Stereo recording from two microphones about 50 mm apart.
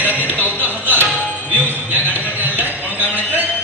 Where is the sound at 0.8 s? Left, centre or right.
Right.